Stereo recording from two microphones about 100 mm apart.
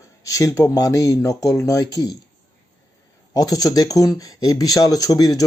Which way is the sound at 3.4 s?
40° left (ahead or behind).